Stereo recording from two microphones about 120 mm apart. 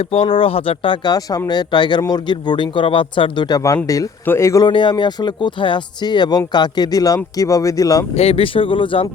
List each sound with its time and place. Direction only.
0.0 s a man's voice: 50° left (ahead or behind)
3.8 s speech: 30° left (ahead or behind)
4.6 s a man's voice: 40° left (ahead or behind)
8.1 s speech: 55° left (ahead or behind)